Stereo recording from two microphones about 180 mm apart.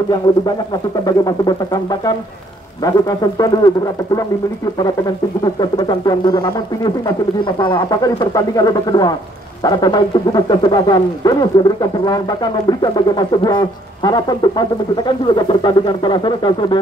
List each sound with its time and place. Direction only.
1.0 s speech: 20° left (ahead or behind)
5.4 s speech: 25° left (ahead or behind)